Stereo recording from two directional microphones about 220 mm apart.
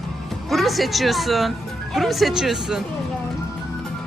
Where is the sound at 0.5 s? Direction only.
Centre (ahead or behind).